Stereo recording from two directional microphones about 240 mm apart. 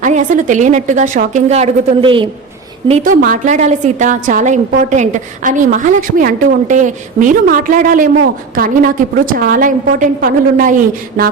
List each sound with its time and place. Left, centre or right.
0.0 s a woman's voice: right